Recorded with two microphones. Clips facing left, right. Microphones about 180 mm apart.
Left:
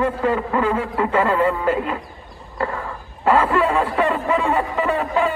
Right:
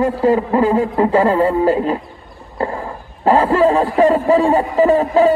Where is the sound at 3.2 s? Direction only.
35° right (ahead or behind).